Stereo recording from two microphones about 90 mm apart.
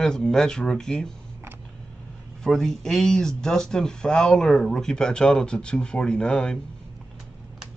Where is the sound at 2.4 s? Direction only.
5° left (ahead or behind).